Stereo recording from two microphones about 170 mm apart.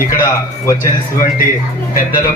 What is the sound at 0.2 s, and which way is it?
Speech, 15° left (ahead or behind).